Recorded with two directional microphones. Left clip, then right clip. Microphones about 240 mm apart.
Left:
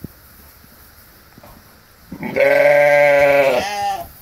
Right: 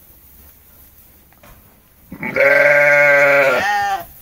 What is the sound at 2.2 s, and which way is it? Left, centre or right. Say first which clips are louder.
Sheep: right 1 dB; centre.